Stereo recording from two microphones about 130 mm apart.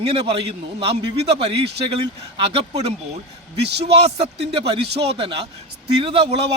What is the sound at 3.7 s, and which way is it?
Speech, 50° right (ahead or behind).